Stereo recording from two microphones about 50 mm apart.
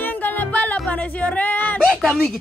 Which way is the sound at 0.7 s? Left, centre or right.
Left.